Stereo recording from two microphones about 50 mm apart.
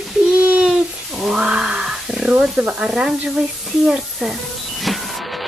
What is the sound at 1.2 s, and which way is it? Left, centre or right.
Speech, centre.